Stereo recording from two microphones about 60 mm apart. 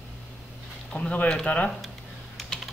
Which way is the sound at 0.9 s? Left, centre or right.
Left.